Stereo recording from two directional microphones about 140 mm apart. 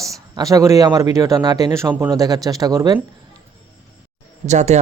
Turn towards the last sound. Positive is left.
turn(degrees=-55)  # may be behind; listen again after turning